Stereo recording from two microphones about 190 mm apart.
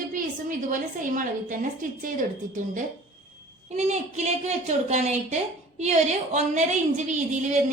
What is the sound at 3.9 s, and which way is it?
A woman's voice, 35° right (ahead or behind).